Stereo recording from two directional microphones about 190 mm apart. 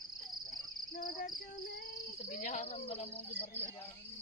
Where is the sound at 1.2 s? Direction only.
45° left (ahead or behind).